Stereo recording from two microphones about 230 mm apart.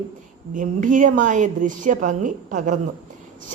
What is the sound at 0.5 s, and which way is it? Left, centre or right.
A woman's voice, right.